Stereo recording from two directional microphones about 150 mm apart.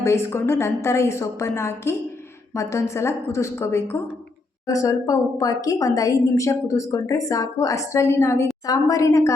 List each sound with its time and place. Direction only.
0.0 s a woman's voice: 20° left (ahead or behind)